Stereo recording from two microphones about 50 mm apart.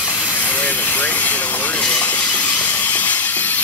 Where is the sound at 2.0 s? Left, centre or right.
Left.